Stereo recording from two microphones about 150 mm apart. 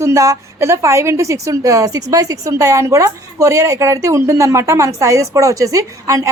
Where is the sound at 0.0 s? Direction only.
20° right (ahead or behind).